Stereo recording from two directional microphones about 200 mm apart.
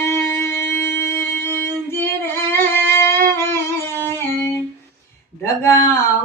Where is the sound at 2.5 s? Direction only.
10° left (ahead or behind).